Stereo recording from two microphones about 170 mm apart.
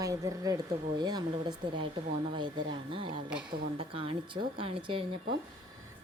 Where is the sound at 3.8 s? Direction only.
35° right (ahead or behind).